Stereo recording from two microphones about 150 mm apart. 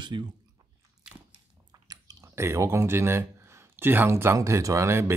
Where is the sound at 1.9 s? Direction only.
25° right (ahead or behind).